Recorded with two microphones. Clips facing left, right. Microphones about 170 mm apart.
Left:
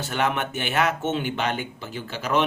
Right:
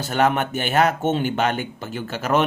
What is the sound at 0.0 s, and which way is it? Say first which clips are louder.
Speech: right 5 dB; 40° right (ahead or behind).